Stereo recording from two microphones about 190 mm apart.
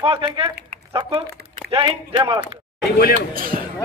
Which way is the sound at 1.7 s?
25° right (ahead or behind).